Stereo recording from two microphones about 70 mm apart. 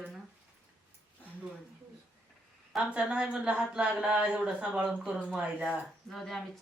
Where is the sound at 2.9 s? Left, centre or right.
Centre.